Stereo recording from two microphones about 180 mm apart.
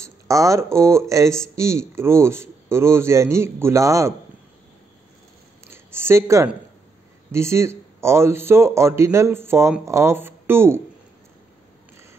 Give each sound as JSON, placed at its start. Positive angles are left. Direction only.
{"t": 0.0, "sound": "speech", "side_deg": -15}
{"t": 5.7, "sound": "speech", "side_deg": -15}